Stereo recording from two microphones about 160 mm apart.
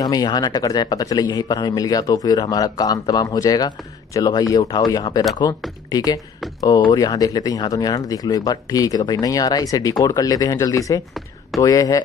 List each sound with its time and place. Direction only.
0.0 s speech: 25° left (ahead or behind)